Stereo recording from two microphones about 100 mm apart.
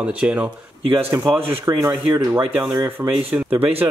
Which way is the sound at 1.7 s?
25° right (ahead or behind).